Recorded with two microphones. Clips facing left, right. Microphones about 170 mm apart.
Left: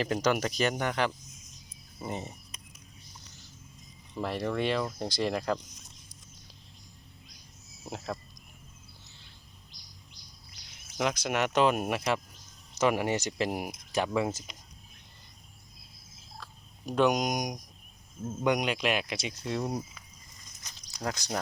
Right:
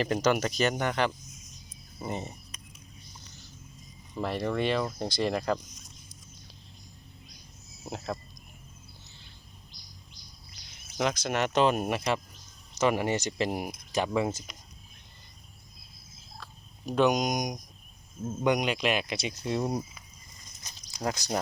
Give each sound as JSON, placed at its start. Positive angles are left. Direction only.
{"t": 0.0, "sound": "speech", "side_deg": 5}
{"t": 4.1, "sound": "speech", "side_deg": 0}
{"t": 7.9, "sound": "speech", "side_deg": 0}
{"t": 10.9, "sound": "speech", "side_deg": 5}
{"t": 16.4, "sound": "turkey", "side_deg": 0}
{"t": 18.4, "sound": "speech", "side_deg": 5}
{"t": 19.3, "sound": "speech", "side_deg": -10}
{"t": 20.7, "sound": "a sound", "side_deg": -20}